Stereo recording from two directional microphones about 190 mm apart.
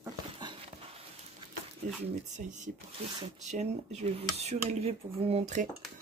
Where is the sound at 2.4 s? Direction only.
40° right (ahead or behind).